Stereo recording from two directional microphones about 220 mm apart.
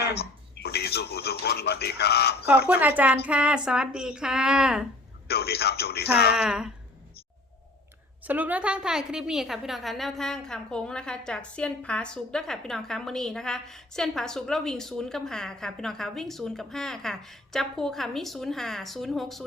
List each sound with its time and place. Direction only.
0.0 s speech: 45° left (ahead or behind)
2.6 s a woman's voice: 5° right (ahead or behind)
5.3 s speech: 45° left (ahead or behind)
6.3 s a woman's voice: 5° right (ahead or behind)
8.2 s a woman's voice: 10° right (ahead or behind)